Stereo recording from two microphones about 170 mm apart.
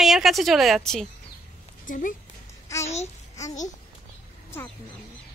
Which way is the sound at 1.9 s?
50° left (ahead or behind).